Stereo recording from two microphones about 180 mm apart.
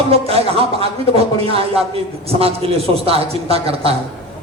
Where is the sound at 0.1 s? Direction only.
35° right (ahead or behind).